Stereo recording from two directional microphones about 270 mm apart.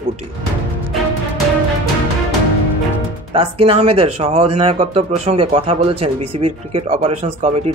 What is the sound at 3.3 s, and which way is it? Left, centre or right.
Speech, centre.